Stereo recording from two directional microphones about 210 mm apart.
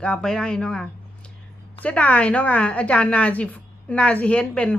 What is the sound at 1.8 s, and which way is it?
A woman's voice, 5° left (ahead or behind).